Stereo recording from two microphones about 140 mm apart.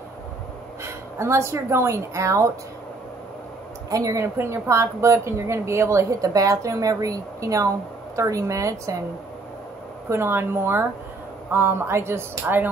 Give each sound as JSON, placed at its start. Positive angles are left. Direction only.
{"t": 0.8, "sound": "a woman's voice", "side_deg": -20}
{"t": 3.9, "sound": "speech", "side_deg": -25}
{"t": 10.0, "sound": "speech", "side_deg": -15}